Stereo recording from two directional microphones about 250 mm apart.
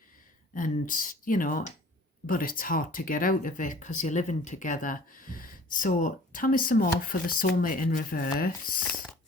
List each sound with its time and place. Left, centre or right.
0.5 s speech: left